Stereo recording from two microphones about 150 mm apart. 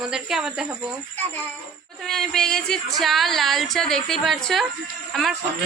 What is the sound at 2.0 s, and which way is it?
Speech, 5° left (ahead or behind).